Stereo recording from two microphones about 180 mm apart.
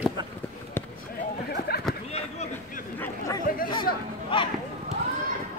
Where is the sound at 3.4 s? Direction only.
50° left (ahead or behind).